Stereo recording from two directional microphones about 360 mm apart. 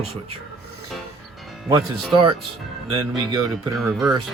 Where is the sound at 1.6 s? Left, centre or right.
Centre.